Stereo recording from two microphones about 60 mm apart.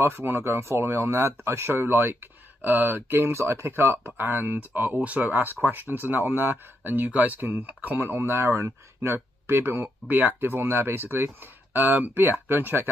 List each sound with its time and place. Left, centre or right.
0.0 s speech: right